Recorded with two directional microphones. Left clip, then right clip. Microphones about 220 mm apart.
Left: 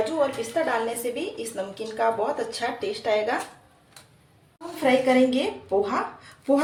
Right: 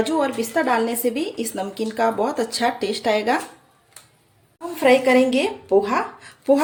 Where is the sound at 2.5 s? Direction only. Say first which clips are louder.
Right 6 dB; 50° right (ahead or behind).